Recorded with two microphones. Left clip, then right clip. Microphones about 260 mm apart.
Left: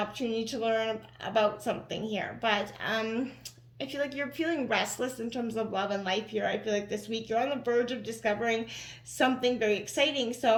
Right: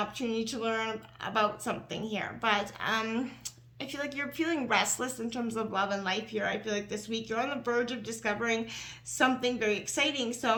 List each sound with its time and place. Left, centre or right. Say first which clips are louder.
0.0 s speech: left 1 dB; centre